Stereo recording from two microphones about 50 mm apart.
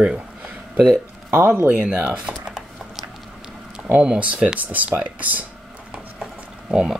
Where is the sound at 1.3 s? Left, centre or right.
Right.